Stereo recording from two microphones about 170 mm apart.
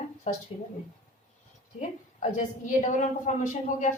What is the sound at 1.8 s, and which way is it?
A woman's voice, 45° left (ahead or behind).